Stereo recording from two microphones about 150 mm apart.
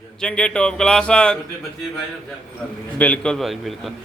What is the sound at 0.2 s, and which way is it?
A man's voice, 5° left (ahead or behind).